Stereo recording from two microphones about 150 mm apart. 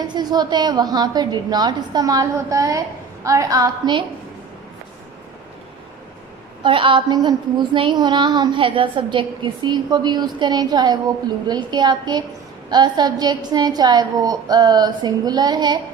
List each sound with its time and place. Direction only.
0.1 s a woman's voice: 30° right (ahead or behind)
6.6 s a woman's voice: 35° right (ahead or behind)